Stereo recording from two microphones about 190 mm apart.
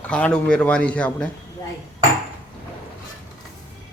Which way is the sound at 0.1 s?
5° left (ahead or behind).